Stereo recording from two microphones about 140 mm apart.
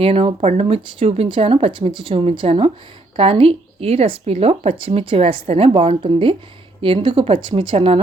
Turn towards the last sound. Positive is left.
turn(degrees=-40)  # may be behind; listen again after turning